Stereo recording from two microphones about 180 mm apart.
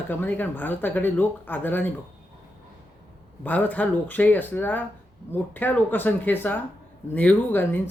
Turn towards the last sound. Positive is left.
turn(degrees=10)  # may be behind; listen again after turning